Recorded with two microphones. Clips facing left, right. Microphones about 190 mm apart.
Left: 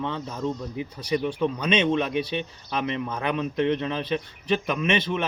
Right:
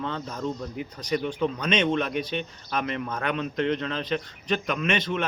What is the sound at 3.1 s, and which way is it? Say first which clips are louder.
Speech: left 2 dB; 10° left (ahead or behind).